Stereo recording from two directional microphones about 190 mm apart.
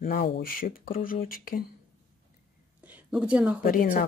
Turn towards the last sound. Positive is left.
turn(degrees=50)  # may be behind; listen again after turning